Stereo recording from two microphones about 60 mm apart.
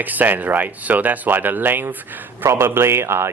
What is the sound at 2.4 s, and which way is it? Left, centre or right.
Speech, right.